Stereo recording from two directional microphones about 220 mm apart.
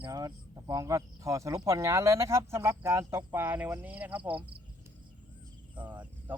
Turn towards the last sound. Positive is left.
turn(degrees=-5)  # may be behind; listen again after turning